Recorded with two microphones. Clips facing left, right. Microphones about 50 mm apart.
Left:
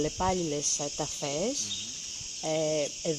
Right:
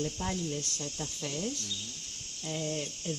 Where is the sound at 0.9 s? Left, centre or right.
Left.